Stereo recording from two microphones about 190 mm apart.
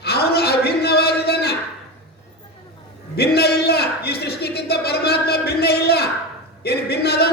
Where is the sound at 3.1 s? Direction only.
55° left (ahead or behind).